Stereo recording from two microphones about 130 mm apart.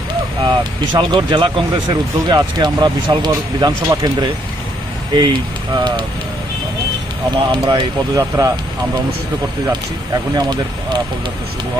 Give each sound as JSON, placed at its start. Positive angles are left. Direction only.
{"t": 0.4, "sound": "speech", "side_deg": -35}
{"t": 7.5, "sound": "speech", "side_deg": -30}
{"t": 10.3, "sound": "speech", "side_deg": -35}